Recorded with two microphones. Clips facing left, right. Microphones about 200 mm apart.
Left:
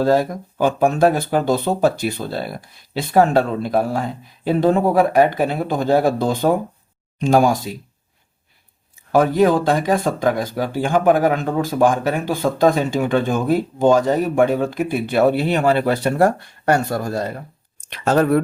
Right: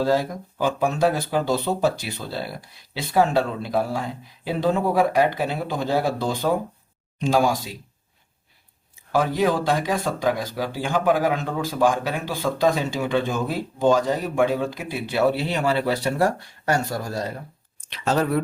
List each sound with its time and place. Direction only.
0.0 s speech: 55° left (ahead or behind)
9.1 s speech: 50° left (ahead or behind)